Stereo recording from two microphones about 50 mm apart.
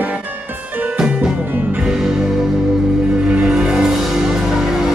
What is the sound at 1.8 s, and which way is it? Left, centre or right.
Music, centre.